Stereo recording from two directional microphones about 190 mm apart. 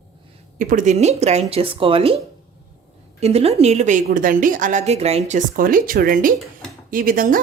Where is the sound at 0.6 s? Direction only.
45° right (ahead or behind).